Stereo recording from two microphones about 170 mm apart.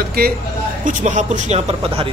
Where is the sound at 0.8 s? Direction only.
45° right (ahead or behind).